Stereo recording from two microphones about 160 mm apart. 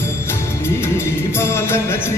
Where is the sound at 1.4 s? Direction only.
15° left (ahead or behind).